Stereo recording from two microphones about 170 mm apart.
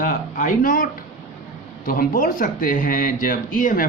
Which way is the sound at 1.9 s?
55° left (ahead or behind).